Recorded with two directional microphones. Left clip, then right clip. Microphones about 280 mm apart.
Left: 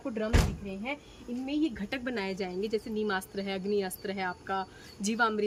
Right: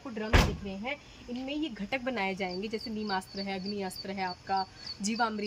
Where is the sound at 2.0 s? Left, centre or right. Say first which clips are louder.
Right 1 dB; centre.